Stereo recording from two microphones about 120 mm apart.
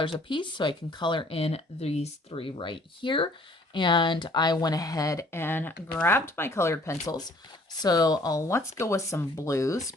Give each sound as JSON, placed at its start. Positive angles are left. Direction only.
{"t": 0.0, "sound": "speech", "side_deg": 45}